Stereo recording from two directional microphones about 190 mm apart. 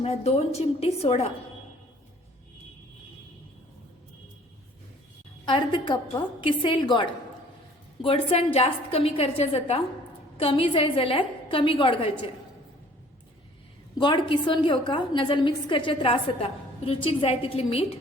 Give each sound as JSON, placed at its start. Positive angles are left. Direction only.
{"t": 0.0, "sound": "a woman's voice", "side_deg": 35}
{"t": 5.5, "sound": "a woman's voice", "side_deg": 25}
{"t": 14.0, "sound": "a woman's voice", "side_deg": 25}